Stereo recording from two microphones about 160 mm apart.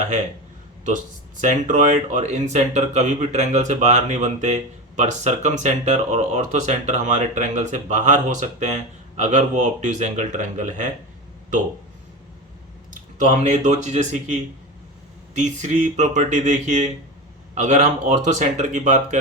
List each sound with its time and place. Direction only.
1.4 s speech: 50° right (ahead or behind)
12.9 s speech: 50° right (ahead or behind)